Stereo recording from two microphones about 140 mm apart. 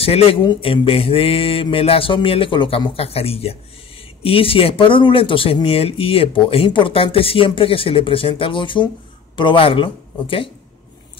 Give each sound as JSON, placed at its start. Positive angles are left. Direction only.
{"t": 0.0, "sound": "speech", "side_deg": 40}